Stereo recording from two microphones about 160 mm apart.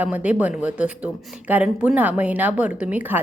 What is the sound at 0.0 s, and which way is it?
A woman's voice, 10° right (ahead or behind).